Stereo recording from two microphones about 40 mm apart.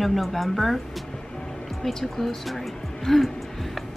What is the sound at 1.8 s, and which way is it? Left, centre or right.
Speech, centre.